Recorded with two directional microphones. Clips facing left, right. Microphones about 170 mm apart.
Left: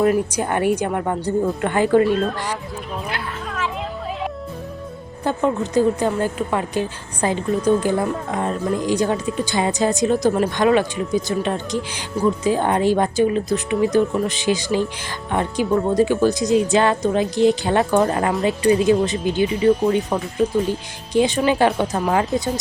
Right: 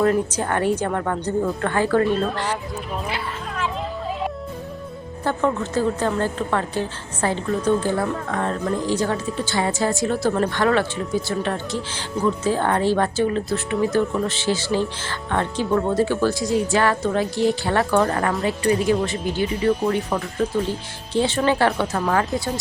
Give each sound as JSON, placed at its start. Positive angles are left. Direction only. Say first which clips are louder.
{"t": 0.0, "sound": "a woman's voice", "louder": "left 2 dB", "side_deg": 10}
{"t": 3.1, "sound": "a sound", "louder": "left 1 dB", "side_deg": 0}
{"t": 5.2, "sound": "a woman's voice", "louder": "left 2 dB", "side_deg": 15}